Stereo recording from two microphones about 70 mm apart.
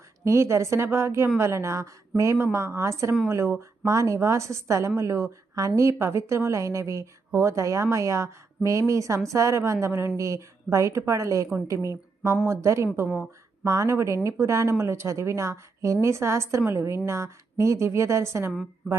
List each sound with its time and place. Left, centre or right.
0.3 s a woman's voice: right